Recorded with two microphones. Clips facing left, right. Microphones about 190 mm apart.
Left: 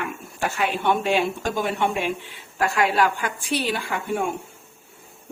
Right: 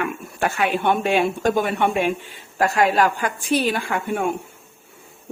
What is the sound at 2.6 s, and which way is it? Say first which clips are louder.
A woman's voice: right 3 dB; 40° right (ahead or behind).